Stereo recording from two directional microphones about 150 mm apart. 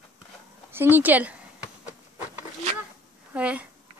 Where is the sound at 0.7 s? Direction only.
15° right (ahead or behind).